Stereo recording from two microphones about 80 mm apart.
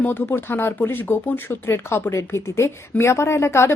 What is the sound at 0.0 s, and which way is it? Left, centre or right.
Speech, left.